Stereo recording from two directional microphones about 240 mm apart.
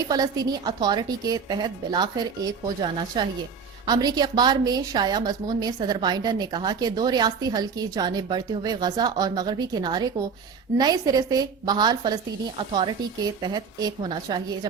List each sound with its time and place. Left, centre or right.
0.1 s a woman's voice: centre